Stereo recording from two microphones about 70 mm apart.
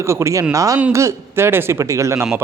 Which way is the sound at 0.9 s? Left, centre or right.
Right.